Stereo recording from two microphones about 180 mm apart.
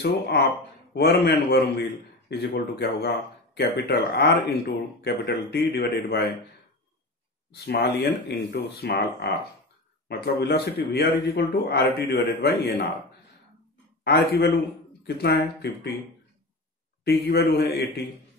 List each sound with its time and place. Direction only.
0.0 s speech: 65° left (ahead or behind)
4.1 s speech: 60° left (ahead or behind)
7.6 s speech: 60° left (ahead or behind)
14.0 s speech: 60° left (ahead or behind)
17.0 s speech: 60° left (ahead or behind)